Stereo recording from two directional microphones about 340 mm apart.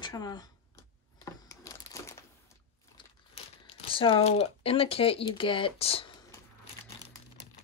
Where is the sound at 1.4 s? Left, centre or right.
Centre.